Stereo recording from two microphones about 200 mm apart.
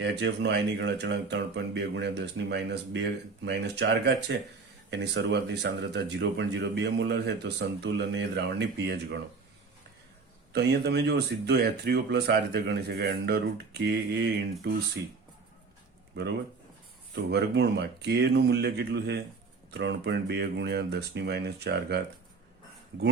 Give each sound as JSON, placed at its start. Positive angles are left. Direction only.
{"t": 0.0, "sound": "speech", "side_deg": -60}
{"t": 10.5, "sound": "speech", "side_deg": -55}
{"t": 17.2, "sound": "speech", "side_deg": -55}